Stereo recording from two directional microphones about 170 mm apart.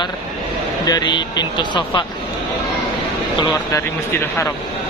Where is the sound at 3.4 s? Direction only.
20° left (ahead or behind).